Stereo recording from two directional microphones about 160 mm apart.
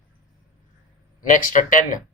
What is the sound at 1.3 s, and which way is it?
Speech, 55° left (ahead or behind).